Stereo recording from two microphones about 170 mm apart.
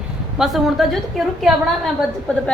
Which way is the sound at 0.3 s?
Centre (ahead or behind).